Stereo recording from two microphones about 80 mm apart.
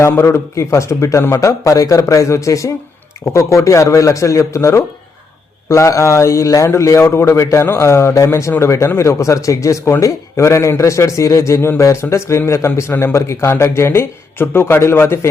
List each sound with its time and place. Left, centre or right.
0.0 s a man's voice: left